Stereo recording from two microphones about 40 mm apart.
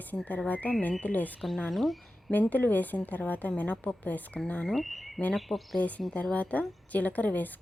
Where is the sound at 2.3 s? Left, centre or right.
Left.